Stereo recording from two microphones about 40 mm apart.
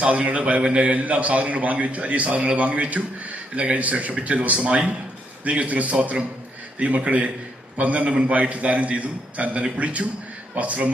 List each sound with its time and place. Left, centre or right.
0.0 s a man's voice: right